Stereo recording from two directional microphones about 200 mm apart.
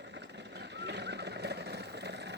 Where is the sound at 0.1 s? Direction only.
60° right (ahead or behind).